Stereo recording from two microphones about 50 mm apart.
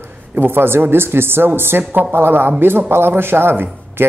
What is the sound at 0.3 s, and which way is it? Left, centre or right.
Speech, right.